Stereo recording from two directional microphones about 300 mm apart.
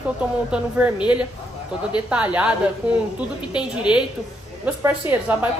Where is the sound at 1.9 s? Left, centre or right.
Centre.